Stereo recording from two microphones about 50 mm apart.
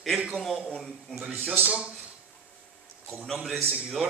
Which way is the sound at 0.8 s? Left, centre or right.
Centre.